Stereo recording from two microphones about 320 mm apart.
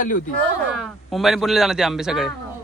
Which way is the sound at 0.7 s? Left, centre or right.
Centre.